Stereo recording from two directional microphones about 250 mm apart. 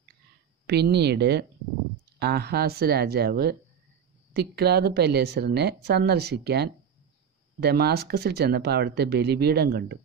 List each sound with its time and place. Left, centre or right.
0.7 s speech: right